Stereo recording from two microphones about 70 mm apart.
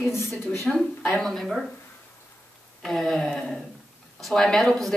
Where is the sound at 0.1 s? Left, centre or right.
Left.